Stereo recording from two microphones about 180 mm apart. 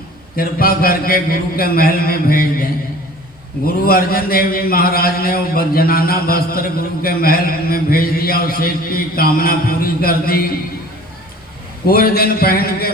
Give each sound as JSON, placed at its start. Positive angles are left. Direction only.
{"t": 0.3, "sound": "a man's voice", "side_deg": 55}
{"t": 3.8, "sound": "a man's voice", "side_deg": 55}
{"t": 11.9, "sound": "a man's voice", "side_deg": 55}